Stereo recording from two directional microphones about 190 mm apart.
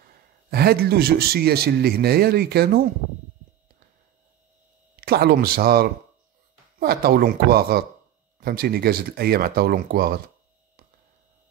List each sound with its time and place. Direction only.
0.0 s a man's voice: 55° right (ahead or behind)
5.0 s speech: 55° right (ahead or behind)